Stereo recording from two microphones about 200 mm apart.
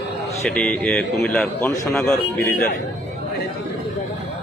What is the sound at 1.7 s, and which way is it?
Speech, 15° left (ahead or behind).